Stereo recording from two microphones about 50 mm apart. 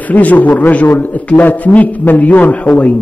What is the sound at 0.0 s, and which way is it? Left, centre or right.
A man's voice, left.